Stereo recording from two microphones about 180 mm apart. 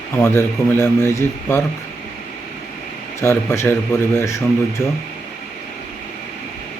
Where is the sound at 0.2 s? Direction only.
15° left (ahead or behind).